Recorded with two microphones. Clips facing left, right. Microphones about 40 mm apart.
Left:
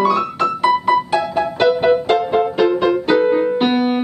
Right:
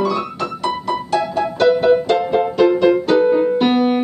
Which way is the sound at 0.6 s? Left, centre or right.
Centre.